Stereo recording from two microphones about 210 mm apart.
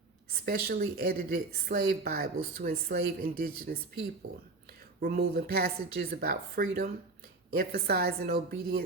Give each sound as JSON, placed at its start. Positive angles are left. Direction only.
{"t": 0.4, "sound": "a woman's voice", "side_deg": -45}
{"t": 4.9, "sound": "a woman's voice", "side_deg": -45}